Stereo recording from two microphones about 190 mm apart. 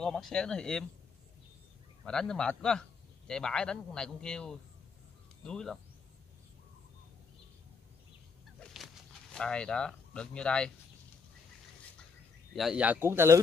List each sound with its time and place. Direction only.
0.0 s a man's voice: centre (ahead or behind)
2.0 s a man's voice: 5° left (ahead or behind)
8.5 s a sound: centre (ahead or behind)
12.5 s speech: 5° right (ahead or behind)